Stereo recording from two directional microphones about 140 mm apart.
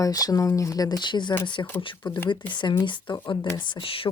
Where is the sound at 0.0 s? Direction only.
25° left (ahead or behind).